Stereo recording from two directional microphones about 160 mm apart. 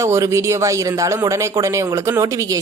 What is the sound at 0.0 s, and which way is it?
Speech, 15° right (ahead or behind).